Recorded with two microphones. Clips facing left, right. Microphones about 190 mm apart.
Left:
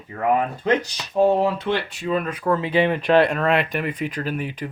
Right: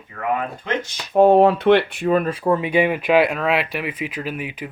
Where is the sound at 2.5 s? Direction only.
15° right (ahead or behind).